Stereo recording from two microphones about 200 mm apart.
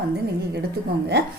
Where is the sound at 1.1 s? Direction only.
55° right (ahead or behind).